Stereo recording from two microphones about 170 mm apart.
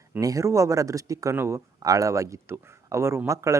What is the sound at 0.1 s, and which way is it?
A man's voice, 20° right (ahead or behind).